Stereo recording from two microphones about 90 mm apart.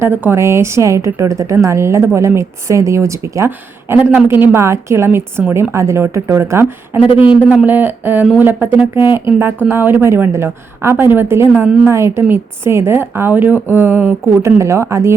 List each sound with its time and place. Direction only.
0.0 s a woman's voice: 25° right (ahead or behind)